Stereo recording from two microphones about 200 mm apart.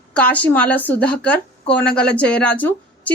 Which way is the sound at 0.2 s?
5° left (ahead or behind).